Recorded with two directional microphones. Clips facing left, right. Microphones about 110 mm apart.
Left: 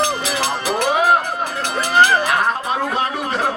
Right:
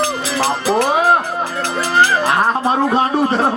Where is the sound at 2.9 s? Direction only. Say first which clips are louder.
Right 6 dB; 30° right (ahead or behind).